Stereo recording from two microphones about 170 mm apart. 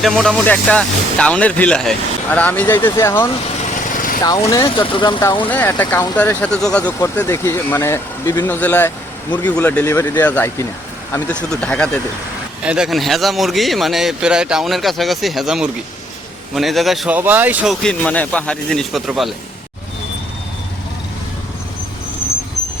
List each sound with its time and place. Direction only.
0.0 s speech: centre (ahead or behind)
3.9 s vehicle: 55° left (ahead or behind)
4.2 s speech: 20° left (ahead or behind)
4.9 s speech: 30° left (ahead or behind)
5.5 s speech: 10° left (ahead or behind)
12.6 s speech: 5° right (ahead or behind)
17.8 s speech: 5° left (ahead or behind)